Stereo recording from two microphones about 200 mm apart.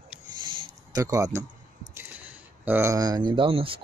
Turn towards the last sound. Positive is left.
turn(degrees=-25)  # may be behind; listen again after turning